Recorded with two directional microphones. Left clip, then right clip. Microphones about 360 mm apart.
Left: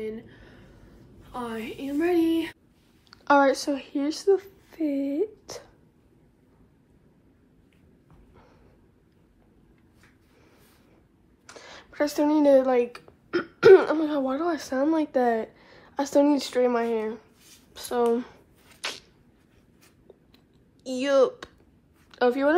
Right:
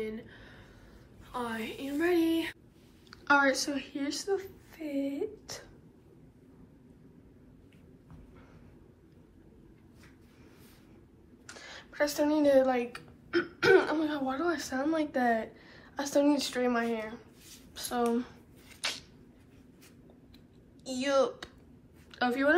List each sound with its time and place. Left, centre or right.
0.0 s a sound: centre
1.2 s speech: centre
3.1 s a woman's voice: centre
11.4 s speech: centre
18.8 s a sound: left
20.8 s a woman's voice: left